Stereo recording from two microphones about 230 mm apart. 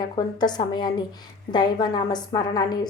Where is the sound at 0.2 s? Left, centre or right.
Centre.